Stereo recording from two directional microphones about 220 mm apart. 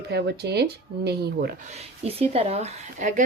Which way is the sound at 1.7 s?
25° right (ahead or behind).